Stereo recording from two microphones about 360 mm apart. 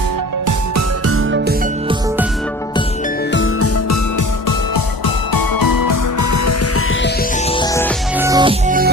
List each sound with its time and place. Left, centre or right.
1.0 s music: right
3.3 s music: left
4.4 s music: left
7.5 s music: centre
8.1 s music: centre